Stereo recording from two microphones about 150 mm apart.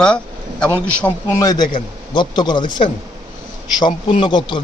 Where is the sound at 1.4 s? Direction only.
25° left (ahead or behind).